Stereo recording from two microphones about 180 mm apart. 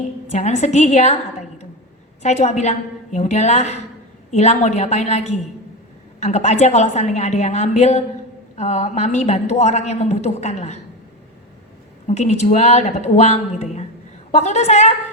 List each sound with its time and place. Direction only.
0.3 s a man's voice: 40° left (ahead or behind)
12.0 s a man's voice: 40° left (ahead or behind)